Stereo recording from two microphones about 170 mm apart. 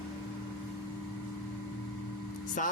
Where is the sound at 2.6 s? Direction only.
50° left (ahead or behind).